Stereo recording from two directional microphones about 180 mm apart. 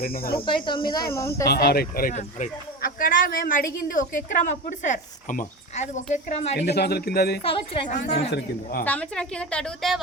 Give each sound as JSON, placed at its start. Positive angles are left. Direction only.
{"t": 0.0, "sound": "speech", "side_deg": 55}
{"t": 0.4, "sound": "speech", "side_deg": 25}
{"t": 1.5, "sound": "speech", "side_deg": 60}
{"t": 6.6, "sound": "speech", "side_deg": 65}
{"t": 7.4, "sound": "speech", "side_deg": 30}
{"t": 8.8, "sound": "a woman's voice", "side_deg": 5}